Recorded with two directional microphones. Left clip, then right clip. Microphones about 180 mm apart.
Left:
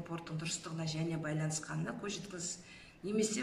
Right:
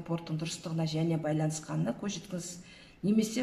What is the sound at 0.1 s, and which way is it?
A man's voice, 35° right (ahead or behind).